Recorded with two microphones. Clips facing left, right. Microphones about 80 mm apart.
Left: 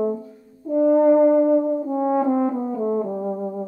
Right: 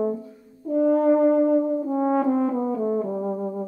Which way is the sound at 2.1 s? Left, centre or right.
Centre.